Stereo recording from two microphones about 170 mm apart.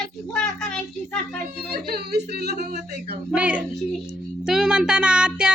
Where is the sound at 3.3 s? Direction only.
5° right (ahead or behind).